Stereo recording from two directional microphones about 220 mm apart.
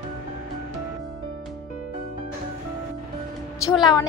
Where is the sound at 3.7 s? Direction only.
20° left (ahead or behind).